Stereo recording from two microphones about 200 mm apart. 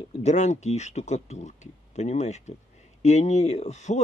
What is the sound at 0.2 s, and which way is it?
Speech, 35° left (ahead or behind).